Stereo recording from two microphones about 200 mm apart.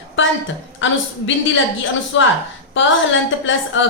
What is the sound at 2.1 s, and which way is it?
Speech, 70° left (ahead or behind).